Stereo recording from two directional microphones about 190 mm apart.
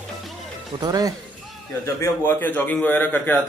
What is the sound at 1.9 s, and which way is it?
A man's voice, 10° left (ahead or behind).